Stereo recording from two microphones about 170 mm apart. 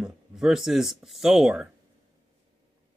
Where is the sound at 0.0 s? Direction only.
5° right (ahead or behind).